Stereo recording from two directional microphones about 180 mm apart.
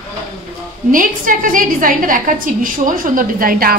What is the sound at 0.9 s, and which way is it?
A woman's voice, 50° right (ahead or behind).